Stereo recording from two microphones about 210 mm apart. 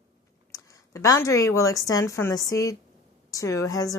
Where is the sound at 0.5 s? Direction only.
15° left (ahead or behind).